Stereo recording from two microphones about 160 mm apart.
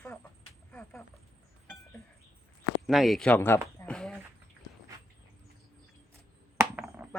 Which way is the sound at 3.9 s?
Centre (ahead or behind).